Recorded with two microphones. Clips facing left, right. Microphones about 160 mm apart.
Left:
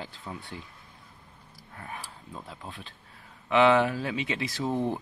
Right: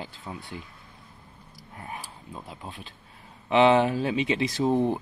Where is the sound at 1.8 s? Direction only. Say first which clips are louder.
Right 2 dB; 15° right (ahead or behind).